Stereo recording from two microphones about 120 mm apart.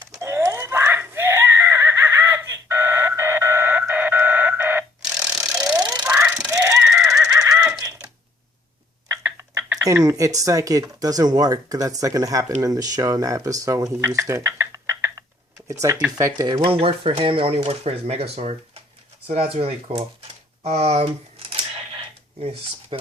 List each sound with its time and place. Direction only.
0.2 s screaming: 25° right (ahead or behind)
5.4 s a sound: 5° right (ahead or behind)
6.5 s laughter: 25° right (ahead or behind)
7.8 s typing: 30° right (ahead or behind)
9.0 s a sound: 15° right (ahead or behind)
9.7 s speech: 30° right (ahead or behind)
16.6 s speech: 50° right (ahead or behind)
20.7 s camera: 60° right (ahead or behind)